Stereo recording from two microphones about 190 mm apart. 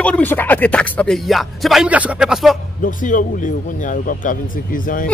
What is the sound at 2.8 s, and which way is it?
Speech, 45° left (ahead or behind).